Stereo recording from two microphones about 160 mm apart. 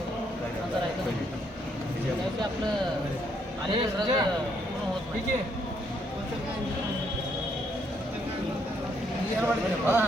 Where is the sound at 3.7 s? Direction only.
30° right (ahead or behind).